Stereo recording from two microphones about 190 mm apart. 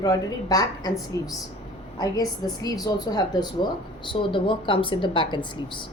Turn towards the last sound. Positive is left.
turn(degrees=25)  # may be behind; listen again after turning